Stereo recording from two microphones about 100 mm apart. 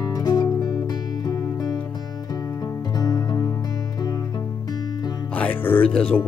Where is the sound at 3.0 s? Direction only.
40° left (ahead or behind).